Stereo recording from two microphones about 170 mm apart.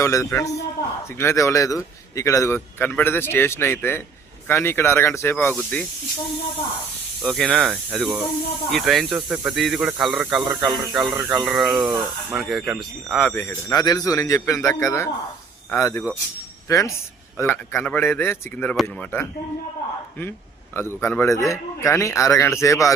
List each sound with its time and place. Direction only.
0.0 s a man's voice: 15° left (ahead or behind)
7.2 s a man's voice: centre (ahead or behind)
20.7 s a man's voice: 15° left (ahead or behind)